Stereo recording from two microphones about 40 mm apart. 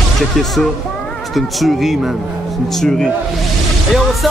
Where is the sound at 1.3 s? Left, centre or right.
Centre.